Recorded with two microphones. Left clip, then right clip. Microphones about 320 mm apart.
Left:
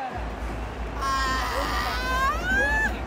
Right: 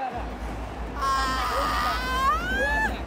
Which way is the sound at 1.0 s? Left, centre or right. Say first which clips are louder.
Right 1 dB; centre.